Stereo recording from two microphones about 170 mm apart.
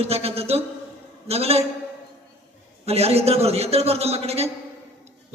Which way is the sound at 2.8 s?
35° right (ahead or behind).